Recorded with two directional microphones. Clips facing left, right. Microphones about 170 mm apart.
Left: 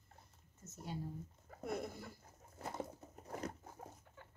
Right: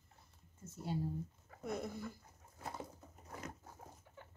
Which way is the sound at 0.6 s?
30° right (ahead or behind).